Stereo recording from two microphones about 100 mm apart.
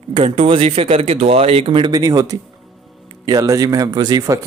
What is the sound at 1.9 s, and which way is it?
Speech, 40° right (ahead or behind).